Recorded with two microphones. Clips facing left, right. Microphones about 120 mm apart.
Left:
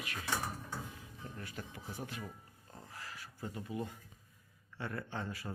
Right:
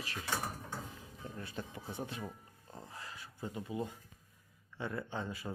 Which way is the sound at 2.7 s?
20° right (ahead or behind).